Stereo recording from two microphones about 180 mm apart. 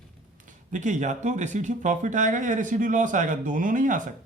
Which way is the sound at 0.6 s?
45° right (ahead or behind).